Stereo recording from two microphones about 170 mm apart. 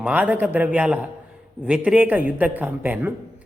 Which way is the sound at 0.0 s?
10° right (ahead or behind).